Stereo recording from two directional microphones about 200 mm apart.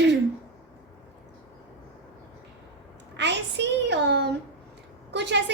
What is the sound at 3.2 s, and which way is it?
A woman's voice, 60° right (ahead or behind).